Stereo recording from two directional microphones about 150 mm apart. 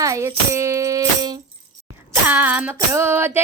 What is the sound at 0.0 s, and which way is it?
Tambourine, 20° right (ahead or behind).